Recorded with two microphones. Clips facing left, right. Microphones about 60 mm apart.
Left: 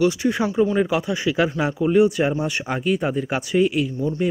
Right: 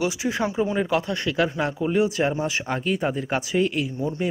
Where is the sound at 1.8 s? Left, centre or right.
Centre.